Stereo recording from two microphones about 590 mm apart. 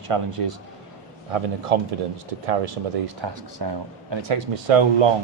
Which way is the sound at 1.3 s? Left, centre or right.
Right.